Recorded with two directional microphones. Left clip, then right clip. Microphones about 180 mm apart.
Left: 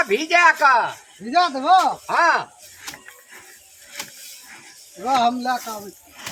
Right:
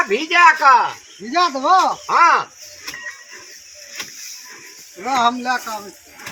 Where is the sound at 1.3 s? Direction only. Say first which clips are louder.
Right 1 dB; 50° left (ahead or behind).